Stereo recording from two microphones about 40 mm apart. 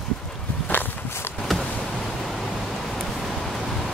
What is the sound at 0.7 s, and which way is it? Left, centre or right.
Walk, left.